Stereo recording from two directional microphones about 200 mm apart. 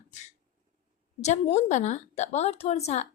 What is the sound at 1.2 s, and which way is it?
Speech, 35° left (ahead or behind).